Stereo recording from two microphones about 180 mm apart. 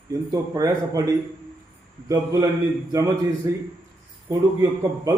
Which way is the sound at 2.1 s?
20° right (ahead or behind).